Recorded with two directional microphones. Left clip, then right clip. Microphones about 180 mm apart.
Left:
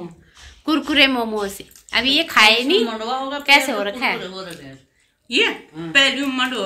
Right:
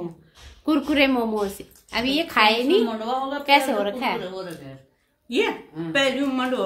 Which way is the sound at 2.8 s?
20° right (ahead or behind).